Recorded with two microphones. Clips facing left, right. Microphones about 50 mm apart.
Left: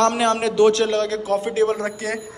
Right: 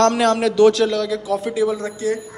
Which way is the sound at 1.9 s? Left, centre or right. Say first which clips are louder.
Right 4 dB; left.